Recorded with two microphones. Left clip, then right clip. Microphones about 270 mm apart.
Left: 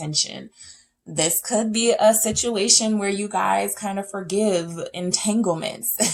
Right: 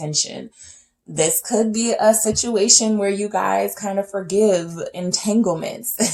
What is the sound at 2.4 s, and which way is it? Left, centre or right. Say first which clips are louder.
Speech: right 3 dB; left.